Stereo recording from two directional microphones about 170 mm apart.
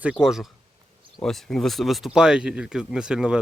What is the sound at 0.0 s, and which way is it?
Speech, 5° right (ahead or behind).